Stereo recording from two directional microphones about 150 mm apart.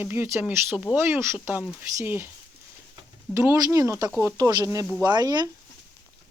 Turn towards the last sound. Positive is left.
turn(degrees=-25)  # may be behind; listen again after turning